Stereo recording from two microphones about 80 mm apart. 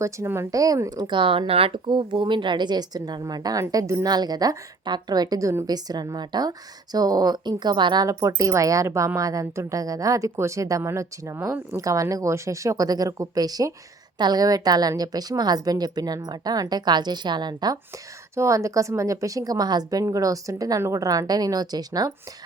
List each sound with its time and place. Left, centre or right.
0.0 s speech: right
4.0 s speech: right
8.4 s a woman's voice: right
18.3 s a woman's voice: right